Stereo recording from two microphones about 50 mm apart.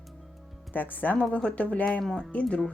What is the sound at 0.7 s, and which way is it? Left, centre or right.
Speech, left.